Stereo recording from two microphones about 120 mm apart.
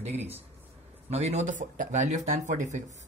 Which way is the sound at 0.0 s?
60° right (ahead or behind).